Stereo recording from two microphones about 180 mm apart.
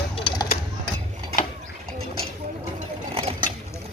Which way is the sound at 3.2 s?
30° right (ahead or behind).